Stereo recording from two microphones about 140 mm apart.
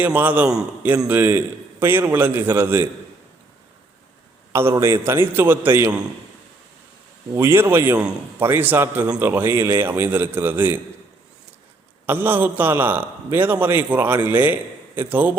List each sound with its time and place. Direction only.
0.0 s a man's voice: 10° right (ahead or behind)
4.5 s a man's voice: 20° right (ahead or behind)
7.3 s a man's voice: 15° right (ahead or behind)
12.0 s a man's voice: 15° right (ahead or behind)